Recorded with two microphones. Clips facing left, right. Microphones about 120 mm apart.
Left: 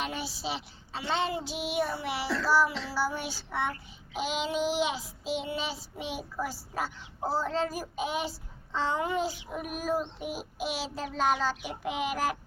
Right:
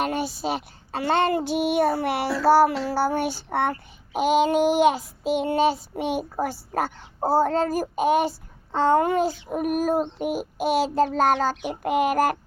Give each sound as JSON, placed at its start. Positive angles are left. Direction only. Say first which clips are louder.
{"t": 0.0, "sound": "speech", "louder": "right 9 dB", "side_deg": -50}
{"t": 2.8, "sound": "child singing", "louder": "right 9 dB", "side_deg": -55}